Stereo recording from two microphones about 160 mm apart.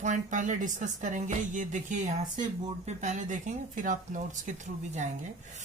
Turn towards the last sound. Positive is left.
turn(degrees=-50)  # may be behind; listen again after turning